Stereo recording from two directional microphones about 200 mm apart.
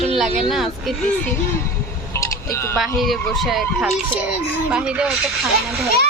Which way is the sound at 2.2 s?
15° left (ahead or behind).